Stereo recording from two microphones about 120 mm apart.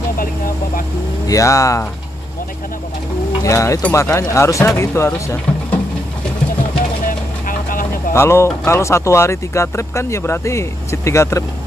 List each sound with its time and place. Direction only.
1.2 s speech: 25° left (ahead or behind)
3.4 s speech: 25° left (ahead or behind)
8.1 s speech: 25° left (ahead or behind)